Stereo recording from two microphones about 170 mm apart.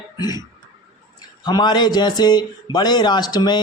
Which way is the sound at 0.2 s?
25° left (ahead or behind).